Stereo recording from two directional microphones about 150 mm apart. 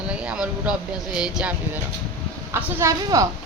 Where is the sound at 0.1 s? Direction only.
5° right (ahead or behind).